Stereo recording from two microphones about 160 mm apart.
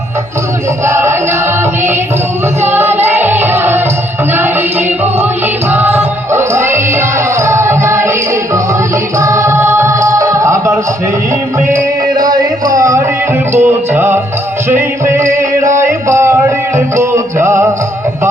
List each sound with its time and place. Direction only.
0.9 s music: 15° right (ahead or behind)
2.6 s music: 15° right (ahead or behind)
5.7 s music: 10° right (ahead or behind)
9.1 s music: 20° right (ahead or behind)
12.2 s music: 25° right (ahead or behind)